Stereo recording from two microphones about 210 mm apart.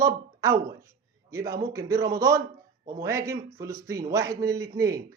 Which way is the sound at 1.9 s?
15° right (ahead or behind).